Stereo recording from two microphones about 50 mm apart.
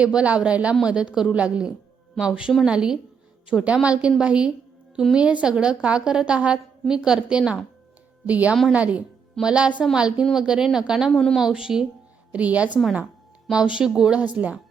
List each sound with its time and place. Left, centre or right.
0.0 s a woman's voice: right
3.5 s a woman's voice: centre
4.2 s a woman's voice: right
8.3 s a woman's voice: right
11.1 s a woman's voice: centre
11.3 s a woman's voice: centre
12.3 s a woman's voice: right
14.2 s a woman's voice: right